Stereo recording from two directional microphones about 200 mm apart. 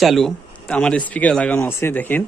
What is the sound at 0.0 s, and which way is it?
A man's voice, centre (ahead or behind).